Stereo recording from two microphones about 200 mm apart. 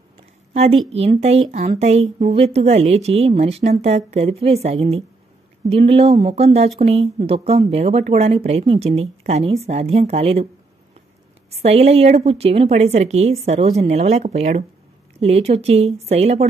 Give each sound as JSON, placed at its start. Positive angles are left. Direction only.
{"t": 0.5, "sound": "a sound", "side_deg": -30}
{"t": 0.9, "sound": "speech", "side_deg": -30}
{"t": 11.6, "sound": "speech", "side_deg": -30}